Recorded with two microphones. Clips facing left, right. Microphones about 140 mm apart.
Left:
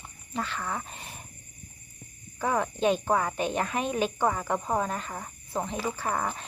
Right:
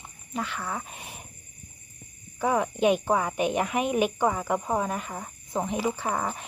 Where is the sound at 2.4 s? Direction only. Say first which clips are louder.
Right 3 dB; 15° right (ahead or behind).